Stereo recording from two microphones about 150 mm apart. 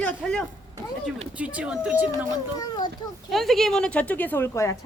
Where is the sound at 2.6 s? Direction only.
30° left (ahead or behind).